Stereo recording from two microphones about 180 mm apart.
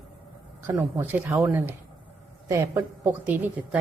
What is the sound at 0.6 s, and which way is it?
A woman's voice, 15° right (ahead or behind).